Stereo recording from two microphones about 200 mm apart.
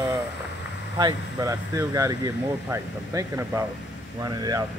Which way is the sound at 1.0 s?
20° right (ahead or behind).